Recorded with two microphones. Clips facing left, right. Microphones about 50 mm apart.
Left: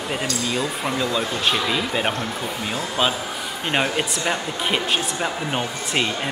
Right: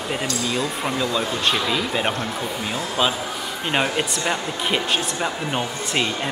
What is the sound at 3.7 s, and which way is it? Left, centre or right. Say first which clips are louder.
Speech: even; centre.